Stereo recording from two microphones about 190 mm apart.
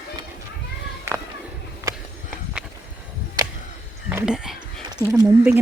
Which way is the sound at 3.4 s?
20° right (ahead or behind).